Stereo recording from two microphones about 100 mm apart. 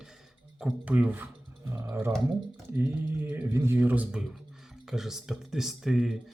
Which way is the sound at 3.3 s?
20° right (ahead or behind).